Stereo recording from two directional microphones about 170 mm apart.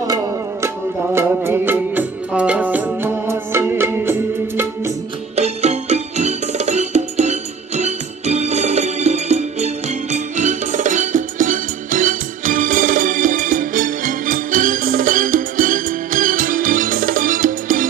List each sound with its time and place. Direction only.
1.1 s music: 15° right (ahead or behind)
5.3 s music: 40° right (ahead or behind)